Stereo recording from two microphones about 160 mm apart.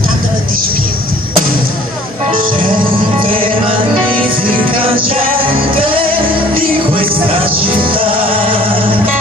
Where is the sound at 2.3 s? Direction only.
60° right (ahead or behind).